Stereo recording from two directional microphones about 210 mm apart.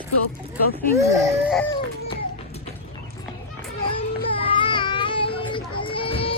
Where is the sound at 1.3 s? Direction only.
5° right (ahead or behind).